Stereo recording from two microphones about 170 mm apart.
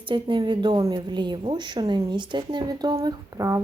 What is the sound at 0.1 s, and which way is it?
A woman's voice, 30° right (ahead or behind).